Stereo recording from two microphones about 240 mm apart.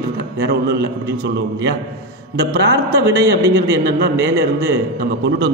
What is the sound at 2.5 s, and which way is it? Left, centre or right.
A man's voice, right.